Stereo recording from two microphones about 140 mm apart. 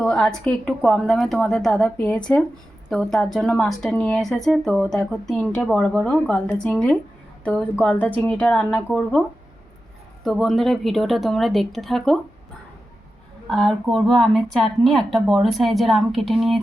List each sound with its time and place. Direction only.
0.0 s a woman's voice: 5° left (ahead or behind)
10.2 s speech: centre (ahead or behind)
13.5 s speech: 5° left (ahead or behind)